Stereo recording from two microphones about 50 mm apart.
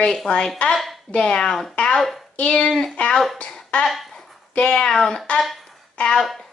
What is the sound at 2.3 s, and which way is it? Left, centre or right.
Speech, left.